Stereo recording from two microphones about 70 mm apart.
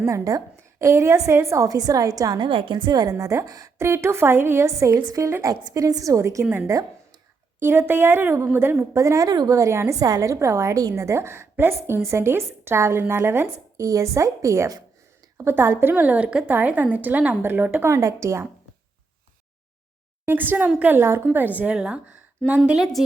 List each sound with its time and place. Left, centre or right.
0.0 s a woman's voice: right
2.8 s a woman's voice: right
3.2 s a woman's voice: right
3.8 s a woman's voice: right
5.6 s a woman's voice: right
7.6 s speech: right
8.8 s a woman's voice: right
9.5 s a woman's voice: right
10.0 s a woman's voice: right
13.8 s a woman's voice: right
17.8 s a woman's voice: right
20.2 s a woman's voice: right
20.9 s a woman's voice: right; by 22.9 s centre